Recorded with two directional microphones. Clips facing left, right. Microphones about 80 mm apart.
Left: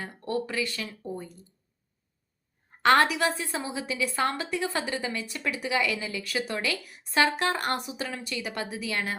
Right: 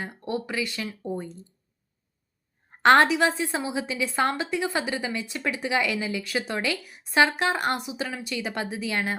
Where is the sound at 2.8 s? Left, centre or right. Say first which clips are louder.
Right 4 dB; right.